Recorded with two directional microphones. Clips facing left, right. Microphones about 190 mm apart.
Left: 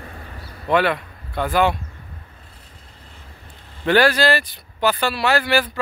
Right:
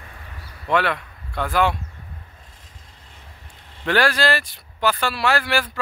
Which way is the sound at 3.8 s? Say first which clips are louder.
Left 4 dB; centre (ahead or behind).